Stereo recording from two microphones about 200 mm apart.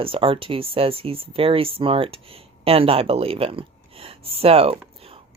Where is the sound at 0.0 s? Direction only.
25° right (ahead or behind).